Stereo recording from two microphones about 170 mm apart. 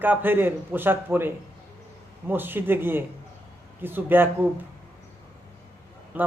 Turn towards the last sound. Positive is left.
turn(degrees=-10)  # may be behind; listen again after turning